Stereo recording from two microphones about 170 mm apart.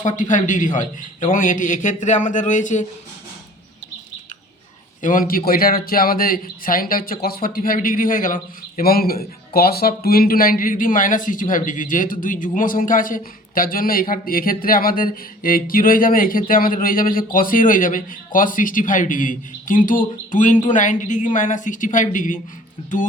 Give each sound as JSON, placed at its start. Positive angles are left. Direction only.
{"t": 0.0, "sound": "a man's voice", "side_deg": 50}
{"t": 5.0, "sound": "a man's voice", "side_deg": 55}